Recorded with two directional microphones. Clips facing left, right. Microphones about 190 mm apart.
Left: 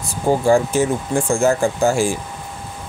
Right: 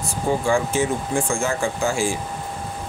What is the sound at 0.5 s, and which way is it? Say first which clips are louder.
Speech: left 6 dB; 40° left (ahead or behind).